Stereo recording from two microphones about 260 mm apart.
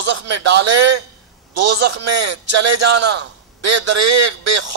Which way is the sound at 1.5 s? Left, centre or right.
Right.